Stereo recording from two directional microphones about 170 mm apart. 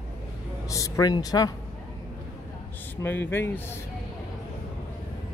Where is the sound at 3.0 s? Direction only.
15° left (ahead or behind).